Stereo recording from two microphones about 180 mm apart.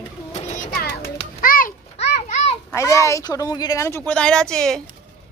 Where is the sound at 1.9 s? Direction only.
40° left (ahead or behind).